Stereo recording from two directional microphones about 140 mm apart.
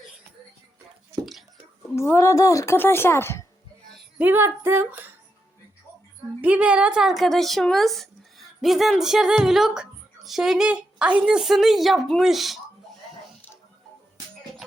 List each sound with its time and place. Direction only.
1.2 s whispering: centre (ahead or behind)
2.0 s a woman's voice: 20° left (ahead or behind)
4.2 s speech: 15° right (ahead or behind)
6.4 s speech: 10° right (ahead or behind)